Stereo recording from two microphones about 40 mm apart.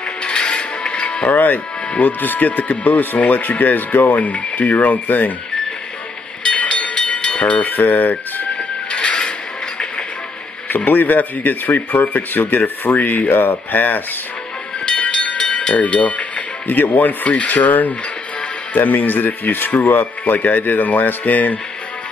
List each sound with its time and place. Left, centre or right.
0.2 s music: left
1.3 s speech: left
6.5 s train: left
7.7 s a sound: left
8.9 s a sound: left
10.9 s speech: left
14.9 s train: left
15.3 s speech: left